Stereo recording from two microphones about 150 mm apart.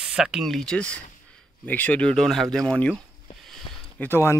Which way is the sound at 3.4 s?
Centre (ahead or behind).